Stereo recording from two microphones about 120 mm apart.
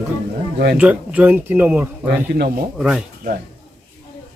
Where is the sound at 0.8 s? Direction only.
10° right (ahead or behind).